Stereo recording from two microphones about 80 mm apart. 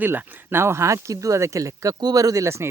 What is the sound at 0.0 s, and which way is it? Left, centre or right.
Speech, right.